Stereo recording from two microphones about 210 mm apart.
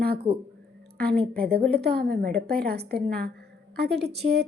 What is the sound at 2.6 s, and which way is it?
A woman's voice, 50° right (ahead or behind).